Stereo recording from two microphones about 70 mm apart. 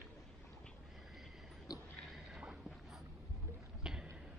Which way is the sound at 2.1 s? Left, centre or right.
Centre.